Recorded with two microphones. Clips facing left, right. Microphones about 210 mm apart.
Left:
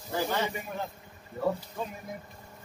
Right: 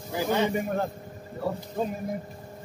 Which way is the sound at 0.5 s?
45° right (ahead or behind).